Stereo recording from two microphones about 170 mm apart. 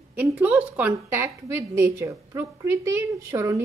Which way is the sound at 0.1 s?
10° right (ahead or behind).